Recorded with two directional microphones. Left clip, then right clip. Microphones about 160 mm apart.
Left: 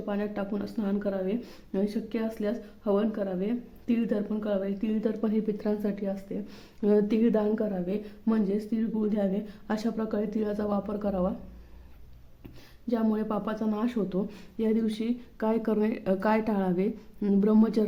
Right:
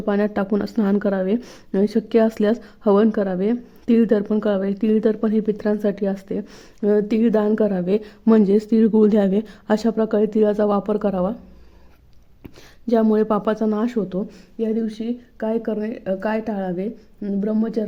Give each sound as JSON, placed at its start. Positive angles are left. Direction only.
{"t": 0.0, "sound": "speech", "side_deg": -50}
{"t": 1.4, "sound": "speech", "side_deg": -40}
{"t": 5.2, "sound": "speech", "side_deg": -35}
{"t": 6.5, "sound": "speech", "side_deg": -25}
{"t": 9.6, "sound": "speech", "side_deg": -35}
{"t": 12.9, "sound": "speech", "side_deg": -40}
{"t": 13.7, "sound": "speech", "side_deg": -30}
{"t": 14.3, "sound": "speech", "side_deg": -10}